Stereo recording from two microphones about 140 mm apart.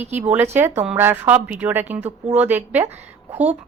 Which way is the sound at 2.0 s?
50° right (ahead or behind).